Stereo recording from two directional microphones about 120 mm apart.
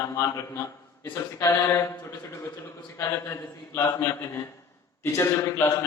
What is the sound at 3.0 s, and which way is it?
A man's voice, 20° left (ahead or behind).